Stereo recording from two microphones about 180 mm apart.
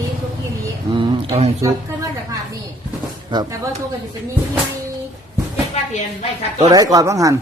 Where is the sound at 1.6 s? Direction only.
20° right (ahead or behind).